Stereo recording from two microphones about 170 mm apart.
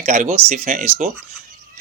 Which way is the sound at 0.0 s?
45° right (ahead or behind).